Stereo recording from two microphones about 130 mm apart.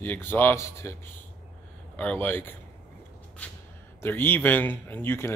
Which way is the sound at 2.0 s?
15° left (ahead or behind).